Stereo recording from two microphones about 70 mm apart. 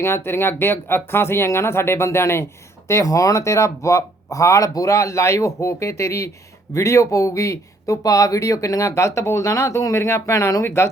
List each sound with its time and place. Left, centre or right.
0.0 s speech: left